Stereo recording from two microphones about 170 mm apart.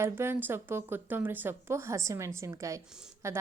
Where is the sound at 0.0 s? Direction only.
15° right (ahead or behind).